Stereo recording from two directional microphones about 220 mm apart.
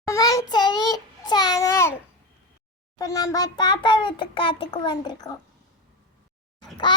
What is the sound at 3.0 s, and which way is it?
Child singing, 15° left (ahead or behind).